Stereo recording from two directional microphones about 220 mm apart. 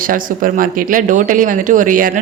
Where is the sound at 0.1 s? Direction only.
40° right (ahead or behind).